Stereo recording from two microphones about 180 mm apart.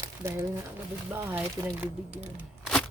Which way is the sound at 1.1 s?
10° right (ahead or behind).